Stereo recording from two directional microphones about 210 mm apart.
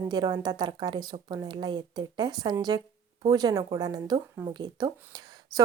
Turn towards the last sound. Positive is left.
turn(degrees=-20)  # may be behind; listen again after turning